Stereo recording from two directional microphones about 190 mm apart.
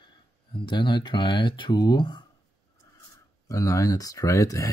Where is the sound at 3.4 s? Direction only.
15° left (ahead or behind).